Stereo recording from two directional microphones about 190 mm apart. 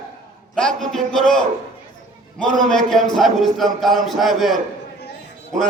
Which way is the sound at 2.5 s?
Centre (ahead or behind).